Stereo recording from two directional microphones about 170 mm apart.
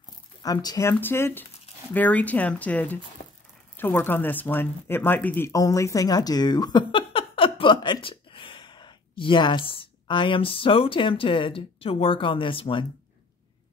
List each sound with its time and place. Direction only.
0.4 s speech: 20° left (ahead or behind)